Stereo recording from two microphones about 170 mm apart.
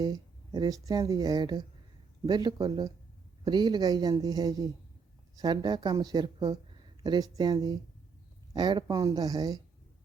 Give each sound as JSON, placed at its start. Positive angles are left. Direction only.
{"t": 0.0, "sound": "speech", "side_deg": -25}